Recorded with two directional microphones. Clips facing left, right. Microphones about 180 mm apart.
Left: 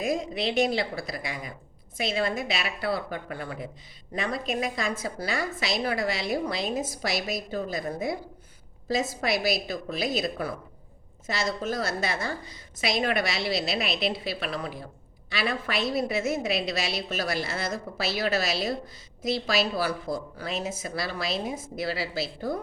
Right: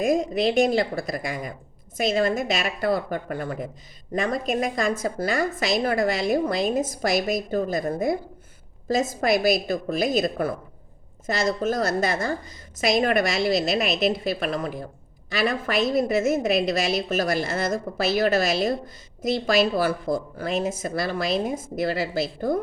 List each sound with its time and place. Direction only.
0.0 s a woman's voice: 45° right (ahead or behind)